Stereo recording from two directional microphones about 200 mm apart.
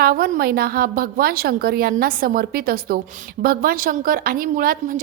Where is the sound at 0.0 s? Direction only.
50° right (ahead or behind).